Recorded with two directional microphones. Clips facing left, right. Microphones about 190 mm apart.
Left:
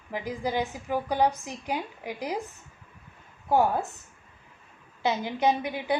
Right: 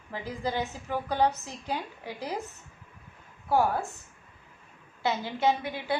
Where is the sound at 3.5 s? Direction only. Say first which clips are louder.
Left 2 dB; 20° left (ahead or behind).